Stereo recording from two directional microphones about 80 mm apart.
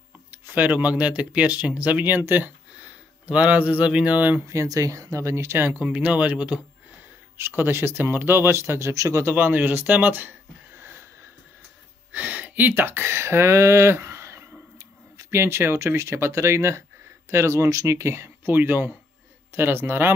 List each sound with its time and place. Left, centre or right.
0.3 s speech: right
4.5 s speech: right; by 6.6 s centre
7.3 s speech: right
9.3 s speech: right
12.1 s speech: centre